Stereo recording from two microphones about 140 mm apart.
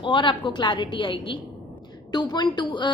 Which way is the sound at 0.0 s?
35° left (ahead or behind).